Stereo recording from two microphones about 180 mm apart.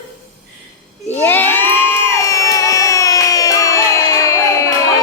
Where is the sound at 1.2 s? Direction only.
10° left (ahead or behind).